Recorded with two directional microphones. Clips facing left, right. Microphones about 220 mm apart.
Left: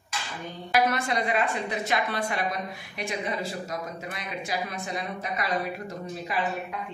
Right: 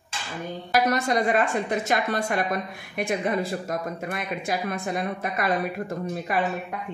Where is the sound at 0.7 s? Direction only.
45° right (ahead or behind).